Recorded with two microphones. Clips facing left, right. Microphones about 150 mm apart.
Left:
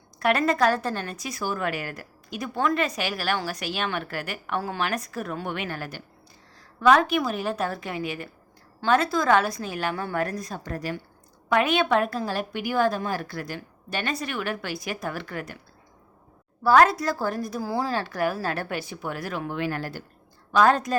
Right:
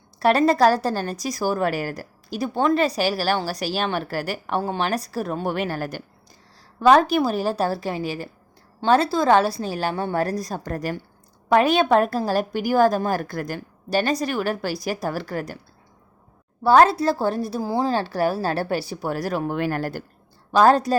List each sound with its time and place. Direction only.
0.2 s a woman's voice: 30° right (ahead or behind)
11.4 s a woman's voice: 35° right (ahead or behind)
16.6 s a woman's voice: 30° right (ahead or behind); by 20.0 s 45° right (ahead or behind)
20.5 s a woman's voice: 35° right (ahead or behind)